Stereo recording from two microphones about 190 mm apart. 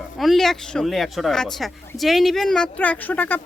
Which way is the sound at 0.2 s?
Centre (ahead or behind).